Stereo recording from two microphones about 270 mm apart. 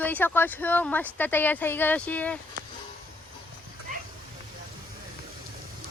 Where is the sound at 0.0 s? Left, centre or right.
Centre.